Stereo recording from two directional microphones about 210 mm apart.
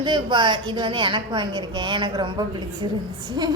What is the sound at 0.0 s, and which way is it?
A woman's voice, 20° right (ahead or behind).